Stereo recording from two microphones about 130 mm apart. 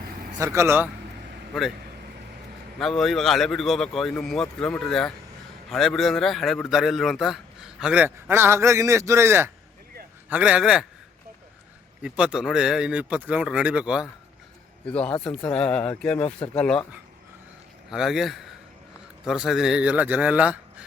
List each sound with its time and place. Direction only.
0.3 s speech: 25° right (ahead or behind)
2.7 s a man's voice: 5° left (ahead or behind)
12.0 s speech: 5° right (ahead or behind)
14.8 s speech: 10° left (ahead or behind)
17.9 s a man's voice: centre (ahead or behind)